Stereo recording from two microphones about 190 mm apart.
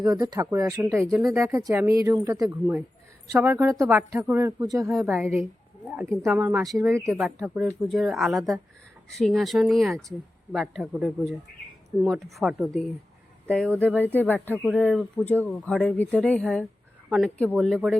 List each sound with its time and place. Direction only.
0.0 s speech: 20° right (ahead or behind); by 6.7 s 5° right (ahead or behind)
6.7 s speech: 15° right (ahead or behind)